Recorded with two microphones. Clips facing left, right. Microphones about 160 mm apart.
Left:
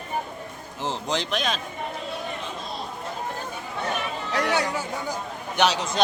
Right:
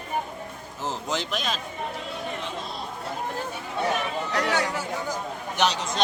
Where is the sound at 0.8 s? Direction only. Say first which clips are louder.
Left 2 dB; 5° right (ahead or behind).